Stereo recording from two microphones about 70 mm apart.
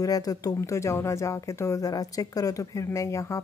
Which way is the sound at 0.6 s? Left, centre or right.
Left.